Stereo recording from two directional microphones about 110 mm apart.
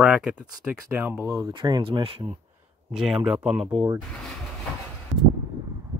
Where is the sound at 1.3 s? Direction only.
40° right (ahead or behind).